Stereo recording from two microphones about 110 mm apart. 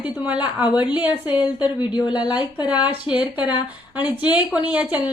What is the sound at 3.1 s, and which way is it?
A woman's voice, 10° right (ahead or behind).